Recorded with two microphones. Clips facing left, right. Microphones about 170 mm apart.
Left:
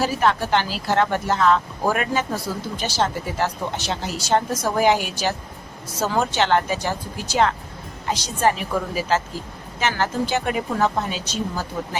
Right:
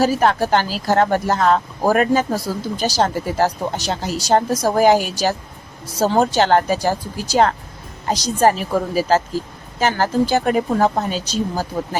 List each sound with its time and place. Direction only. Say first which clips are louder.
0.0 s speech: right 4 dB; 40° right (ahead or behind)